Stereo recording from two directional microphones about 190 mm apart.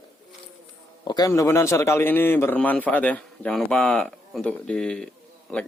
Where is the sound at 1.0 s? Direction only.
20° left (ahead or behind); by 5.6 s 5° left (ahead or behind).